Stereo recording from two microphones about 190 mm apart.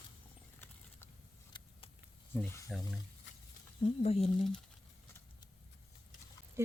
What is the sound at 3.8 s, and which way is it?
Speech, 30° left (ahead or behind).